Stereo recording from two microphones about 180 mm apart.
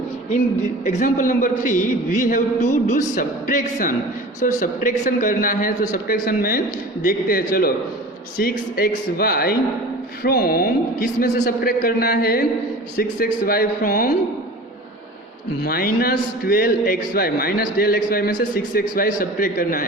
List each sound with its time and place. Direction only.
0.9 s a man's voice: 45° left (ahead or behind)
15.6 s a man's voice: 55° left (ahead or behind)